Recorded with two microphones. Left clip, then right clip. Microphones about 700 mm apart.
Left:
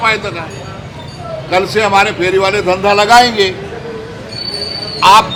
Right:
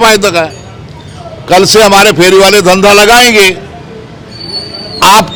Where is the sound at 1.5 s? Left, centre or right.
Right.